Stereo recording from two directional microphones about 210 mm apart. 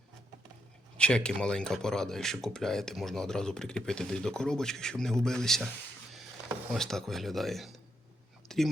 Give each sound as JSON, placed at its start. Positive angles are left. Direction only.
{"t": 0.9, "sound": "speech", "side_deg": 5}
{"t": 6.7, "sound": "speech", "side_deg": 0}